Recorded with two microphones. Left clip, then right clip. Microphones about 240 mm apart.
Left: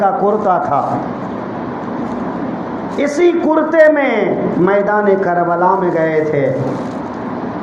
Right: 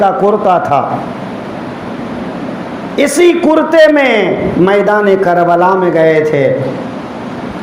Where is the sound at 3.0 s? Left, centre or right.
Right.